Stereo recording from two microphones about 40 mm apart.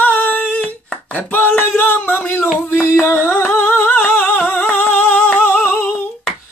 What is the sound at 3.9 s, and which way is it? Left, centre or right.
Music, left.